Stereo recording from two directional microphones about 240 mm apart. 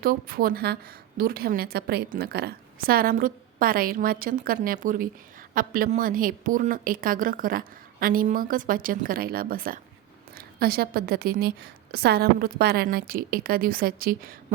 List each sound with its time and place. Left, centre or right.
0.0 s a woman's voice: right